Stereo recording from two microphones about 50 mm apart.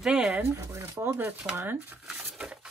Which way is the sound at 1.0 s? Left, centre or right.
Right.